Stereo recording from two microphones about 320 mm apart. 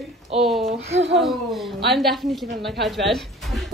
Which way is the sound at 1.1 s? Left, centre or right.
Centre.